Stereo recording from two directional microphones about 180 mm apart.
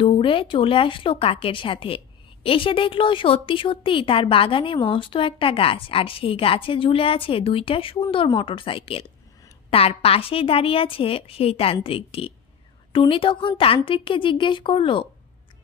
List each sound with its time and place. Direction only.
0.0 s a woman's voice: 30° left (ahead or behind)